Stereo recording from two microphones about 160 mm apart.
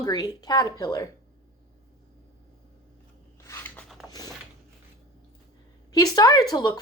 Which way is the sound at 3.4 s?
15° left (ahead or behind).